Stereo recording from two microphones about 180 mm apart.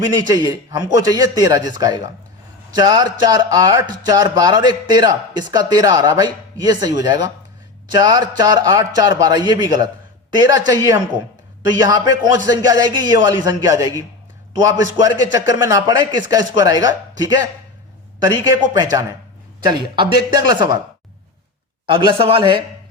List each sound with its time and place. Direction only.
0.1 s speech: 20° right (ahead or behind)
21.8 s speech: 30° right (ahead or behind)